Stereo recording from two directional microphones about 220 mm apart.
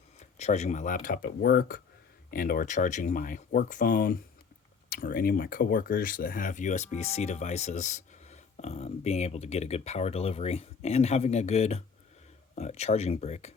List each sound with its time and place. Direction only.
0.2 s speech: 30° left (ahead or behind)